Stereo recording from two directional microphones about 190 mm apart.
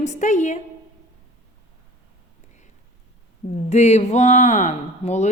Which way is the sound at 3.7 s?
35° left (ahead or behind).